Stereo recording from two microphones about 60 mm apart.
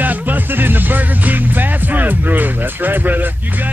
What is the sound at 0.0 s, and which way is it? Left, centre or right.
Music, right.